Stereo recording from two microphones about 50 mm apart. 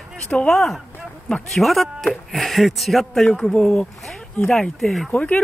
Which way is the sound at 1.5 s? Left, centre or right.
Centre.